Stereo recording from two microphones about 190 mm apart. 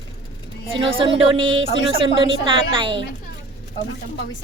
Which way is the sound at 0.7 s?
25° right (ahead or behind).